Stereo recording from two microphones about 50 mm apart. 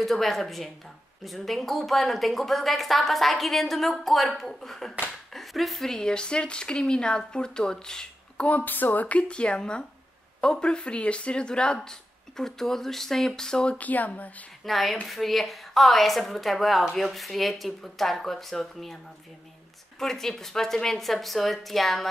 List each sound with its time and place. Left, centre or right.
0.0 s a woman's voice: centre
8.5 s speech: left
9.3 s speech: centre
13.7 s speech: left
14.6 s a woman's voice: centre
20.0 s speech: centre